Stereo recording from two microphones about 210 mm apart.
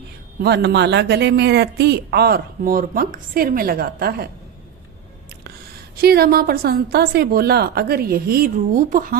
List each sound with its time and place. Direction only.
0.3 s speech: 50° right (ahead or behind)
6.0 s speech: 45° right (ahead or behind)